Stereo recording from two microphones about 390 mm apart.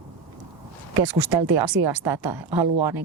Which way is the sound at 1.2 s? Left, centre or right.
Right.